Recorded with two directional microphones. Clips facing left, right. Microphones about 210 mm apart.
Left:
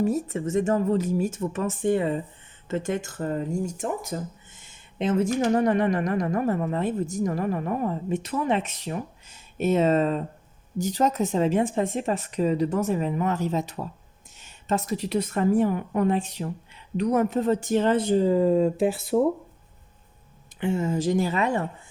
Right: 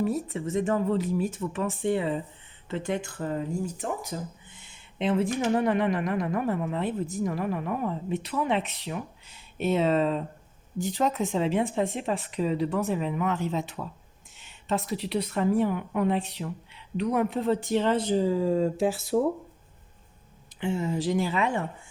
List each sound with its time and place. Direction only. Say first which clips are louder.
0.0 s speech: left 3 dB; 45° left (ahead or behind)
20.6 s speech: left 3 dB; 50° left (ahead or behind)